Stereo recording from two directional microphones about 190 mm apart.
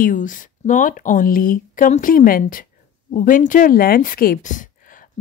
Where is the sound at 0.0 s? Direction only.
45° left (ahead or behind).